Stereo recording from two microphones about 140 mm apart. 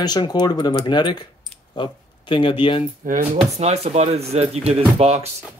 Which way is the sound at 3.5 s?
50° right (ahead or behind).